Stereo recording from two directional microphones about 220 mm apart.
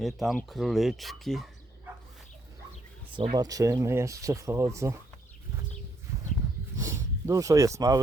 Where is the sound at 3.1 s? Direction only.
20° right (ahead or behind).